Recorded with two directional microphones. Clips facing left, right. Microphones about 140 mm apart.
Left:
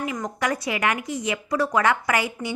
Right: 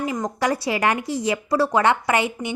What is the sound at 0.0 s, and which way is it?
A woman's voice, 30° right (ahead or behind).